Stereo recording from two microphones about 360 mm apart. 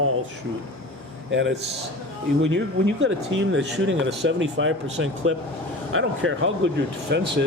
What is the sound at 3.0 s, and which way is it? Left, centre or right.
Speech, right.